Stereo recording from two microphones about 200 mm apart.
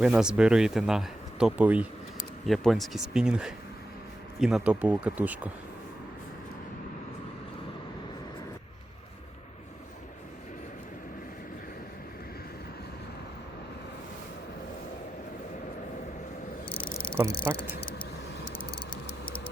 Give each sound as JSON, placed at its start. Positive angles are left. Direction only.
{"t": 0.0, "sound": "speech", "side_deg": -5}
{"t": 16.6, "sound": "insect", "side_deg": 25}
{"t": 17.7, "sound": "vehicle", "side_deg": 50}